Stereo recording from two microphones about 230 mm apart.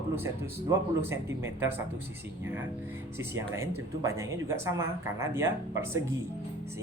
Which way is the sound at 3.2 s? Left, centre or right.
Centre.